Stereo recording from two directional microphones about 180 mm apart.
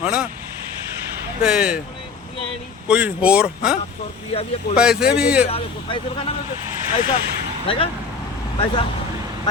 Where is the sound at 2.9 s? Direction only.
5° right (ahead or behind).